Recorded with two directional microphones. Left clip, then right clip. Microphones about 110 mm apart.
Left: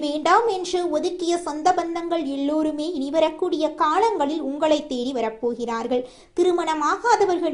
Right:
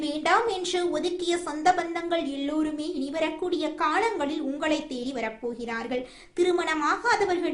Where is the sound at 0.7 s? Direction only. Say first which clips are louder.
Left 4 dB; 20° left (ahead or behind).